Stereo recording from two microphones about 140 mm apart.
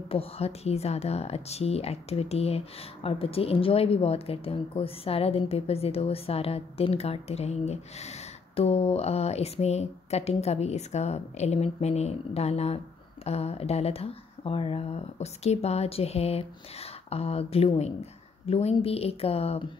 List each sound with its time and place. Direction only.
0.1 s a woman's voice: 45° left (ahead or behind)